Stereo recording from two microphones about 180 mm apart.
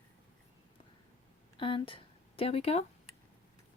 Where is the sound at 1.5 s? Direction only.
30° left (ahead or behind).